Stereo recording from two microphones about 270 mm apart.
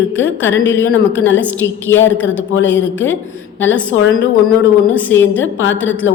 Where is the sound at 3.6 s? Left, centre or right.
Left.